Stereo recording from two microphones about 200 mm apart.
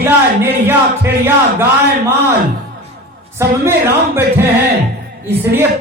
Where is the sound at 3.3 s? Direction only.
15° right (ahead or behind).